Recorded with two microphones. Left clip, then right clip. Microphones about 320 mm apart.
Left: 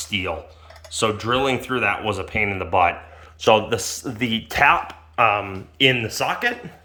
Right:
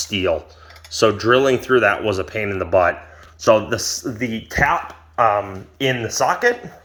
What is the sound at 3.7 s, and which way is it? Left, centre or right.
Speech, centre.